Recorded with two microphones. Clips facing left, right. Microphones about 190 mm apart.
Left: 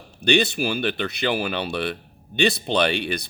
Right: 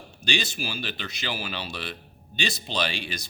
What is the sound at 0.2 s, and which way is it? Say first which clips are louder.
A man's voice: left 10 dB; 60° left (ahead or behind).